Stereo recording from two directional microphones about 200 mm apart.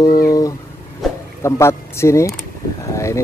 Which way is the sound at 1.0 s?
Centre (ahead or behind).